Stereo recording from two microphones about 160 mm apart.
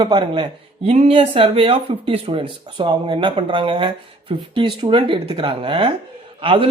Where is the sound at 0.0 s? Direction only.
30° right (ahead or behind).